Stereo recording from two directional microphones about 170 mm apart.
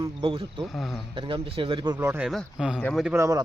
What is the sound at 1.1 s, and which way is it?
Speech, 30° right (ahead or behind).